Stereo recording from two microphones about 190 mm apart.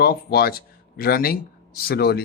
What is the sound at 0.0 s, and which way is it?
Speech, 55° left (ahead or behind).